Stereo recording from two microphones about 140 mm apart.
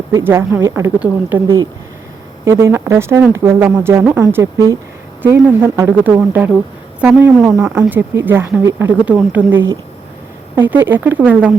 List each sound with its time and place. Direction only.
0.1 s speech: 15° right (ahead or behind)
0.9 s speech: 10° right (ahead or behind)
2.4 s speech: 20° right (ahead or behind)